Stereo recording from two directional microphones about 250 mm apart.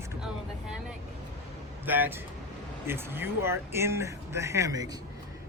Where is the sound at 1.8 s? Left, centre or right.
Centre.